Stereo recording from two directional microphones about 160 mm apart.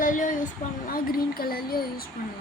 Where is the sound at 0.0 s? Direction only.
55° left (ahead or behind).